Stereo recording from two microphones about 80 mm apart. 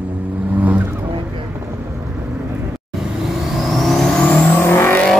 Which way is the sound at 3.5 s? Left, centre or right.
Centre.